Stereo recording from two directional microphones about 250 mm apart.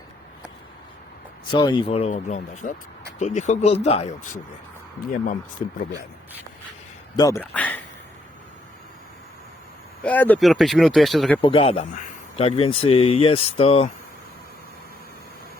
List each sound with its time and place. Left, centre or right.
1.5 s speech: centre
7.2 s speech: centre
10.0 s speech: centre
11.3 s speech: left